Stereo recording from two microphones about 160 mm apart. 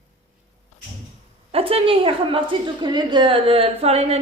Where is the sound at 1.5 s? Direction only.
35° right (ahead or behind).